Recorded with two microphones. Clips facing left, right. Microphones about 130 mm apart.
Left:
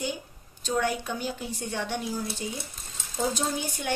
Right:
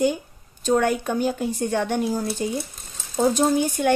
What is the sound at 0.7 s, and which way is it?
Speech, 50° right (ahead or behind).